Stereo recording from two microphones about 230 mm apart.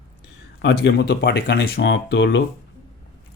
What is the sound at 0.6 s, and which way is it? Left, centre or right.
Speech, left.